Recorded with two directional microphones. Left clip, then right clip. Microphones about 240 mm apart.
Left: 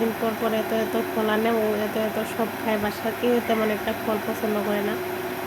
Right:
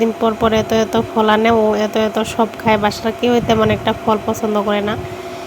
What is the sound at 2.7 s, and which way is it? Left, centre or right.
A woman's voice, right.